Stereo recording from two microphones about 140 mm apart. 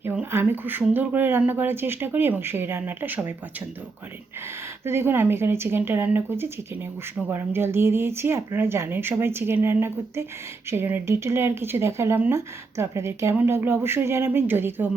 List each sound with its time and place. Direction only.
0.0 s speech: 15° right (ahead or behind)
4.9 s speech: 15° right (ahead or behind)